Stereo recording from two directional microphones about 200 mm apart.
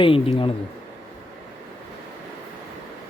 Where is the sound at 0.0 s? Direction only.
25° left (ahead or behind).